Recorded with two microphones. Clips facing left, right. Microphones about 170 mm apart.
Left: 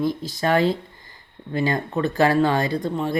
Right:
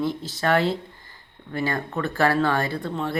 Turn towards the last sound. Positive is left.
turn(degrees=15)  # may be behind; listen again after turning